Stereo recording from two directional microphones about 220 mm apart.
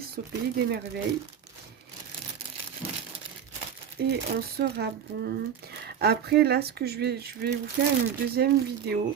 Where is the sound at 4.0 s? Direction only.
45° right (ahead or behind).